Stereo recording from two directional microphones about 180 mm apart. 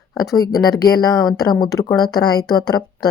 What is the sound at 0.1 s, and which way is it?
Speech, 20° left (ahead or behind).